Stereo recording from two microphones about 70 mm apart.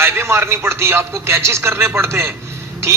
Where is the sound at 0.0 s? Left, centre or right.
Right.